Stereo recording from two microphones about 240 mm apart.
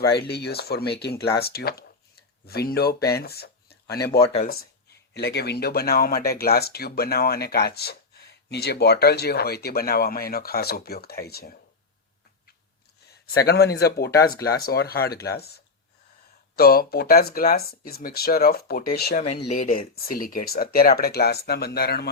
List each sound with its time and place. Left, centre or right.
0.3 s speech: left
3.2 s a sound: left
4.2 s speech: left
5.1 s speech: left
13.5 s speech: left
14.1 s speech: centre
14.6 s speech: left